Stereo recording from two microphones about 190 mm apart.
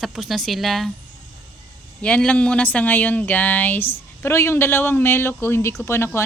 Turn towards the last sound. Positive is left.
turn(degrees=15)  # may be behind; listen again after turning